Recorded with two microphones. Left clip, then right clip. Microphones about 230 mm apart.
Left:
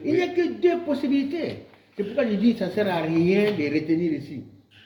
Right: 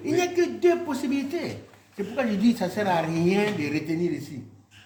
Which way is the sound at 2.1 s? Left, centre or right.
Right.